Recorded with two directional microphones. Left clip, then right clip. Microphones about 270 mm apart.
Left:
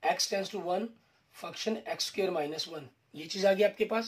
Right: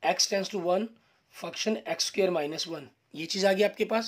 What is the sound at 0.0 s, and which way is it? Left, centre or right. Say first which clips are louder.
Speech: right 3 dB; right.